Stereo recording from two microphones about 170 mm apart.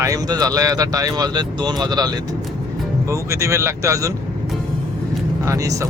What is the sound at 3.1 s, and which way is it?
Speech, 15° right (ahead or behind).